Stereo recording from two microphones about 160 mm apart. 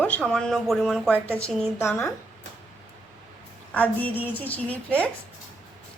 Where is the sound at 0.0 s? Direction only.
10° left (ahead or behind).